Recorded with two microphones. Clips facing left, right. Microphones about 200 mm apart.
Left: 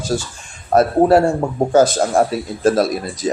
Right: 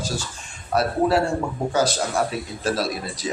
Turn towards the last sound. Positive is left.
turn(degrees=45)  # may be behind; listen again after turning